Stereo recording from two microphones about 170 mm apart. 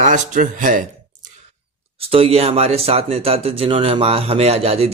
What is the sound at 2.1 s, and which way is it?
Speech, 35° right (ahead or behind).